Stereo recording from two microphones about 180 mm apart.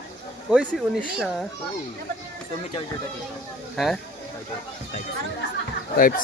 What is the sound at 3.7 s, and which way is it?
Speech, centre (ahead or behind).